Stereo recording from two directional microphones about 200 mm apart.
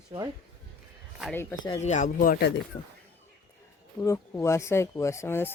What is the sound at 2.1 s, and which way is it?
Speech, 50° left (ahead or behind).